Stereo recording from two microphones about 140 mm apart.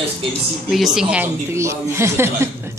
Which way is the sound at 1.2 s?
20° right (ahead or behind).